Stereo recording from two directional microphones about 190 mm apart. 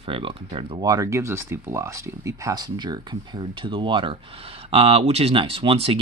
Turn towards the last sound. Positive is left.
turn(degrees=-30)  # may be behind; listen again after turning